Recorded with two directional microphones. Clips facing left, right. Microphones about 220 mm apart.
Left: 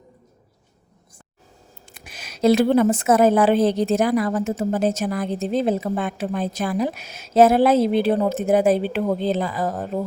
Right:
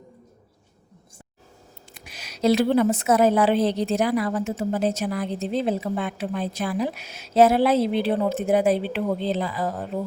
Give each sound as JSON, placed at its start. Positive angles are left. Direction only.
{"t": 1.9, "sound": "a woman's voice", "side_deg": 50}